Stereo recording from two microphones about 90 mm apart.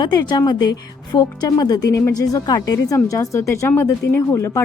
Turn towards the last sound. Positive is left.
turn(degrees=30)  # may be behind; listen again after turning